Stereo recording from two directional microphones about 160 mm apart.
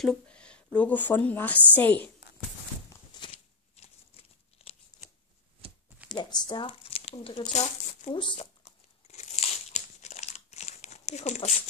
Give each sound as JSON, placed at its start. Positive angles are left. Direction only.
{"t": 0.0, "sound": "a woman's voice", "side_deg": 5}
{"t": 3.1, "sound": "a sound", "side_deg": 25}
{"t": 3.7, "sound": "a sound", "side_deg": 40}
{"t": 6.0, "sound": "speech", "side_deg": 30}
{"t": 8.1, "sound": "speech", "side_deg": 30}
{"t": 8.6, "sound": "crunch", "side_deg": 45}